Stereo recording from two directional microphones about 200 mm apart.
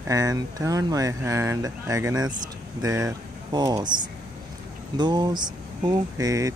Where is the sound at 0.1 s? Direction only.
20° right (ahead or behind).